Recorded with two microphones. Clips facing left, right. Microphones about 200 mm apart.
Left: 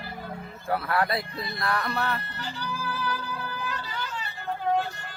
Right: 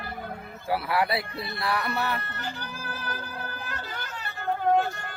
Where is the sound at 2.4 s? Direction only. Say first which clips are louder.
Left 2 dB; 50° right (ahead or behind).